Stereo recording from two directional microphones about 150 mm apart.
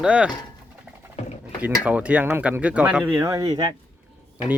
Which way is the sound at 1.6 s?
10° right (ahead or behind).